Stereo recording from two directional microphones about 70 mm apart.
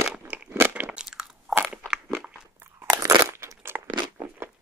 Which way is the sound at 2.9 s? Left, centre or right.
Right.